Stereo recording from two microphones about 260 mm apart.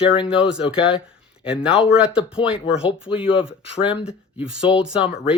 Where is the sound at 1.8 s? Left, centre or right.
Centre.